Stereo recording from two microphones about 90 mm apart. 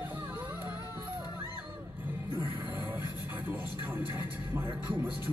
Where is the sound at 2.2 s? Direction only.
20° right (ahead or behind).